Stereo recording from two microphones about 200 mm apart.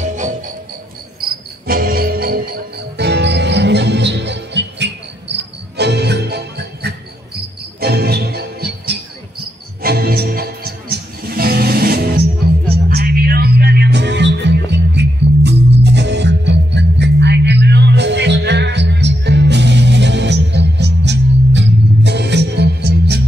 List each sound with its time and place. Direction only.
0.0 s music: 40° right (ahead or behind)
1.2 s cricket: 50° right (ahead or behind)
3.0 s music: 60° right (ahead or behind)